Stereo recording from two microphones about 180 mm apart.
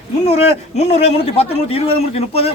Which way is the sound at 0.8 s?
35° left (ahead or behind).